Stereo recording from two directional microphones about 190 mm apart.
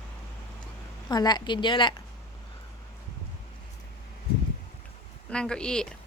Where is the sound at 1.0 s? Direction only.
20° left (ahead or behind).